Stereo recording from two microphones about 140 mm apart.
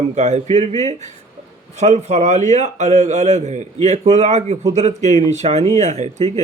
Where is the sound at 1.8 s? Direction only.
55° right (ahead or behind).